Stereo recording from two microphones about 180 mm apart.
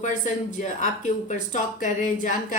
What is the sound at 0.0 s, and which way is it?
Speech, 45° left (ahead or behind).